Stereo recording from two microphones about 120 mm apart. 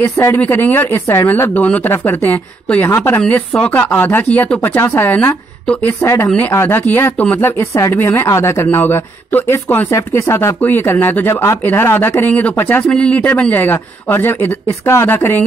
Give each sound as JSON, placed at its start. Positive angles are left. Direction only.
{"t": 0.0, "sound": "speech", "side_deg": 20}
{"t": 6.2, "sound": "speech", "side_deg": 10}